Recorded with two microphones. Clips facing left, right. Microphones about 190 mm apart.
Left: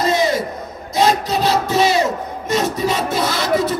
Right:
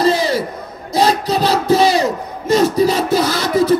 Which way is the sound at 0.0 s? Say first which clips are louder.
Right 2 dB; 35° right (ahead or behind).